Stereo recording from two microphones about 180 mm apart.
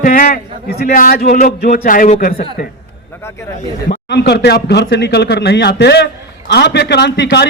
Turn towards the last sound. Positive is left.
turn(degrees=70)  # may be behind; listen again after turning